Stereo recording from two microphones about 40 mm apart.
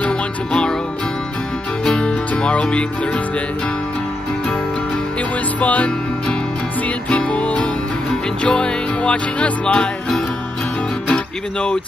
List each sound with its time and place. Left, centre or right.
0.0 s music: left
2.0 s music: left
5.6 s music: left
7.1 s music: left